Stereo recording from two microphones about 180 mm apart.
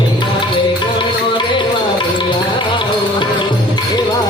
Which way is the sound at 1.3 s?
25° left (ahead or behind).